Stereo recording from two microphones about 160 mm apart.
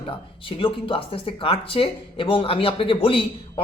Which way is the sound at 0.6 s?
35° left (ahead or behind).